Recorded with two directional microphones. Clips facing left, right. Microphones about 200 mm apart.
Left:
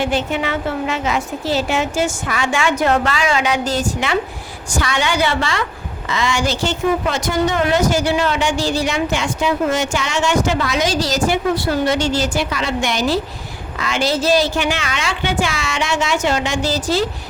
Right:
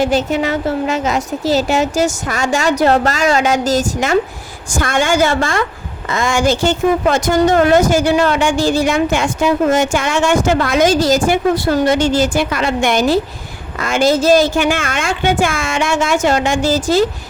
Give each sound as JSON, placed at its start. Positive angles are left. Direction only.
{"t": 0.0, "sound": "a woman's voice", "side_deg": -40}